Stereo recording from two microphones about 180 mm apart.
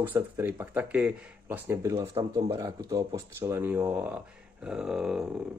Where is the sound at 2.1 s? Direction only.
30° right (ahead or behind).